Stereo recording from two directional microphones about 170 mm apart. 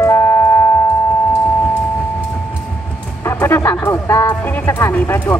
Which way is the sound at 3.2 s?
15° left (ahead or behind).